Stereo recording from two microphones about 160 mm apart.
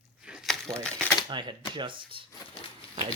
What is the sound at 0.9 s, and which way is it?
Typewriter, 5° left (ahead or behind).